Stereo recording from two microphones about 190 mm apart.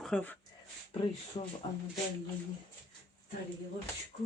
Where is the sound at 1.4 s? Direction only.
30° left (ahead or behind).